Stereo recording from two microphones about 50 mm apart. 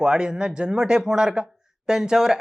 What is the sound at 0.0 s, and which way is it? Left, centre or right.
Speech, centre.